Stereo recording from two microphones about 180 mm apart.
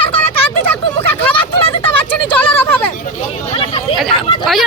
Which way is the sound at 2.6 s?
10° left (ahead or behind).